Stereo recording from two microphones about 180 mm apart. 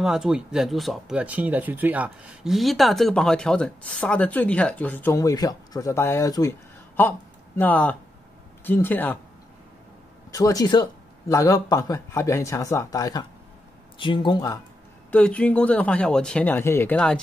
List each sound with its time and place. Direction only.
0.0 s a man's voice: 5° right (ahead or behind)
10.3 s speech: 20° left (ahead or behind)
15.0 s speech: 5° left (ahead or behind)